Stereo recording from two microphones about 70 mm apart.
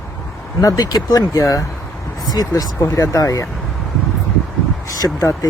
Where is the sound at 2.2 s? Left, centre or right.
Left.